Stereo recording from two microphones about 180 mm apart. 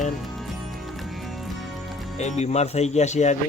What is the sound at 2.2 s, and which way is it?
Speech, 40° left (ahead or behind).